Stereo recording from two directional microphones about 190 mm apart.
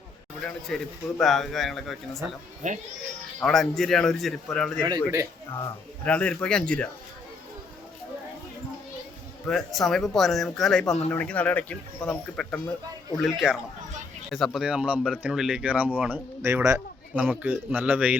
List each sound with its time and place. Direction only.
0.7 s speech: centre (ahead or behind)
2.6 s speech: 40° right (ahead or behind)
3.4 s speech: centre (ahead or behind)
4.8 s speech: 15° right (ahead or behind)
6.1 s speech: 5° left (ahead or behind)
9.5 s speech: centre (ahead or behind)